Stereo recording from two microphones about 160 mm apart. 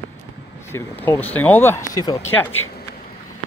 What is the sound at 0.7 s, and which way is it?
Speech, 15° left (ahead or behind).